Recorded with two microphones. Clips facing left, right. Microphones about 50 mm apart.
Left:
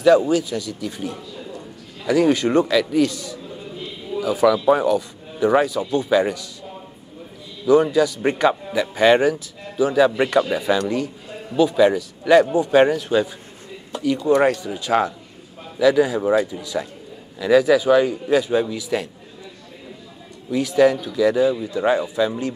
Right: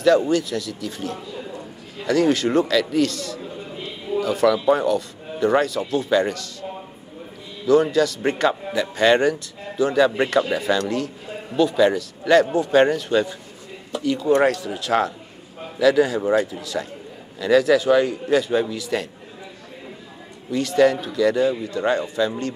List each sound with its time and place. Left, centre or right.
0.0 s a man's voice: centre
7.6 s a man's voice: centre
20.5 s a man's voice: centre